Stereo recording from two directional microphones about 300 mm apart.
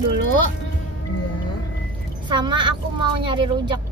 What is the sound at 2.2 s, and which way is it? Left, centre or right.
A woman's voice, centre.